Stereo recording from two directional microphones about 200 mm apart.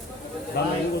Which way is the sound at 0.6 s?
55° left (ahead or behind).